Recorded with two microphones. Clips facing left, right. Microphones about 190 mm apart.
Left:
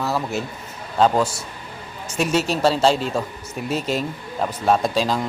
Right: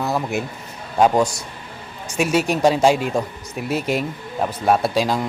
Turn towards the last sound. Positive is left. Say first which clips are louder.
# right 1 dB
turn(degrees=-10)  # may be behind; listen again after turning